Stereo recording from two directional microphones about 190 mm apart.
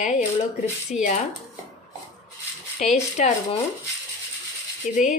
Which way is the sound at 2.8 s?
40° left (ahead or behind).